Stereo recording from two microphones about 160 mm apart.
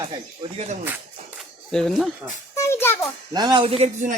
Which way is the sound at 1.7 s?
5° left (ahead or behind).